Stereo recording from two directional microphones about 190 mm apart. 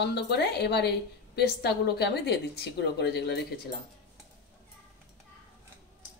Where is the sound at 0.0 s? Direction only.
60° left (ahead or behind).